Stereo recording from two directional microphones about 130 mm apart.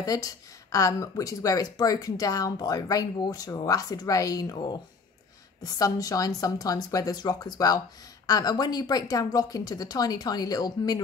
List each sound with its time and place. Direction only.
0.0 s speech: 30° left (ahead or behind)